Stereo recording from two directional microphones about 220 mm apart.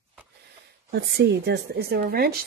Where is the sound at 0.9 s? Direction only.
50° right (ahead or behind).